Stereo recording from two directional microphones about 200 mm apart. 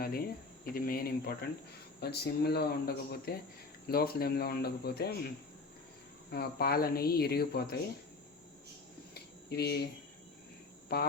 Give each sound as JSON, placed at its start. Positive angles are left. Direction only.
{"t": 0.0, "sound": "speech", "side_deg": 50}
{"t": 6.3, "sound": "speech", "side_deg": 50}
{"t": 9.5, "sound": "speech", "side_deg": 55}
{"t": 10.9, "sound": "speech", "side_deg": 50}